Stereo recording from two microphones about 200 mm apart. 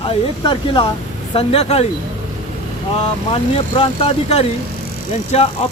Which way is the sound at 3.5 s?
30° left (ahead or behind).